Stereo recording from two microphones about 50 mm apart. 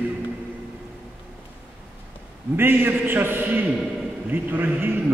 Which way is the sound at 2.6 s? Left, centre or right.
Right.